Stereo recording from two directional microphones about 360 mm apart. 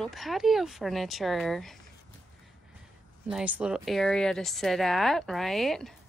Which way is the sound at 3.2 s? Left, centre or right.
Centre.